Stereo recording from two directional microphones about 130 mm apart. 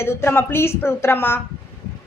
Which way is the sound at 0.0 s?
20° left (ahead or behind).